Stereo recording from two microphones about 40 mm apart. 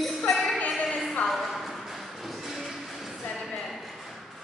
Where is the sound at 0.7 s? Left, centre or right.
Centre.